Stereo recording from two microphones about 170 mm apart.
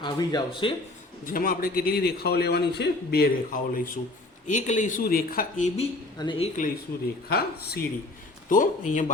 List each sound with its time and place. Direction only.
0.0 s speech: 25° left (ahead or behind)
1.2 s a man's voice: 55° left (ahead or behind)
4.4 s speech: 45° left (ahead or behind)
6.1 s speech: 30° left (ahead or behind)
7.3 s speech: 65° left (ahead or behind)
8.4 s speech: 50° left (ahead or behind)